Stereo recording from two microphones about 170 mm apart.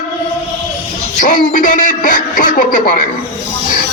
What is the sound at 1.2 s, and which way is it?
Speech, 50° left (ahead or behind).